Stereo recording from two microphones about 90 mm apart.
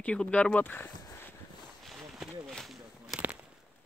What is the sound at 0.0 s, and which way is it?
Speech, 15° left (ahead or behind).